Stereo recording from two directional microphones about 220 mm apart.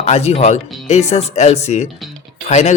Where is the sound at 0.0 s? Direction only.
30° left (ahead or behind).